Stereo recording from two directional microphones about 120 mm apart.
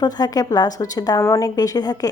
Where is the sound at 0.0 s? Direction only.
30° left (ahead or behind).